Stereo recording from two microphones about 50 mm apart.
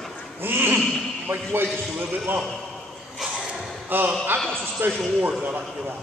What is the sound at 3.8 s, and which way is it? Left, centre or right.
Speech, right.